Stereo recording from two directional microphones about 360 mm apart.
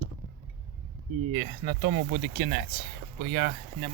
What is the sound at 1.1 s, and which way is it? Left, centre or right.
Speech, right.